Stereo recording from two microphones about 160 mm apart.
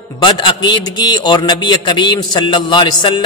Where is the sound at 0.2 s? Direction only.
30° left (ahead or behind).